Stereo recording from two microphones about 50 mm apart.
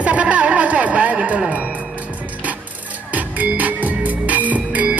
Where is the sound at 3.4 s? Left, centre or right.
Right.